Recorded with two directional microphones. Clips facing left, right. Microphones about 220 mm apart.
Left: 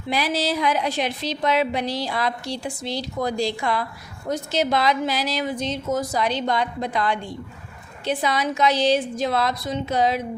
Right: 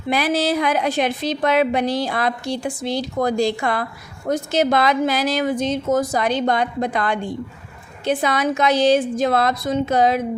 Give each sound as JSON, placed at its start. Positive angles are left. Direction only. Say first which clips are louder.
{"t": 0.1, "sound": "a woman's voice", "louder": "right 4 dB", "side_deg": -55}